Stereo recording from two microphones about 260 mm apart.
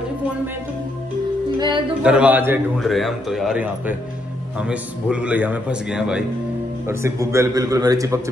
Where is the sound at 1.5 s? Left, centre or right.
Centre.